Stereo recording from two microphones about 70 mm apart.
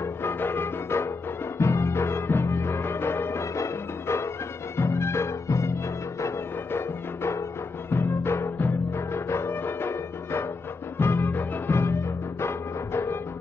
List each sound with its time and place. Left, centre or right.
0.0 s music: left
7.9 s music: left